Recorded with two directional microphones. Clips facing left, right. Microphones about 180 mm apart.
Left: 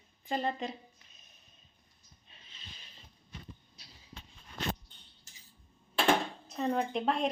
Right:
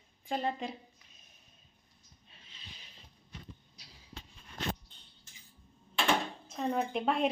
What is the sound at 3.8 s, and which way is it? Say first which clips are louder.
Basketball bounce: even; 10° right (ahead or behind).